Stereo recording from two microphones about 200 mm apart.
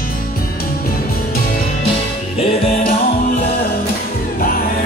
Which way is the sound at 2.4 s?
30° left (ahead or behind).